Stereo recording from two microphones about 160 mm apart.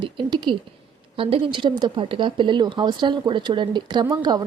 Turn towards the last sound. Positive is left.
turn(degrees=-25)  # may be behind; listen again after turning